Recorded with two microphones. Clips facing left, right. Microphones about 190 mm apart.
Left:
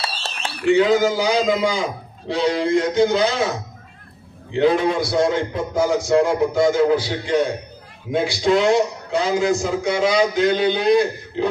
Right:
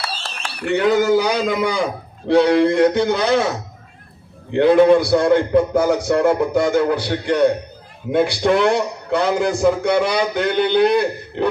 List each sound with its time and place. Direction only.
0.0 s a sound: 25° left (ahead or behind)
0.6 s a man's voice: 60° right (ahead or behind)
4.5 s a man's voice: 60° right (ahead or behind)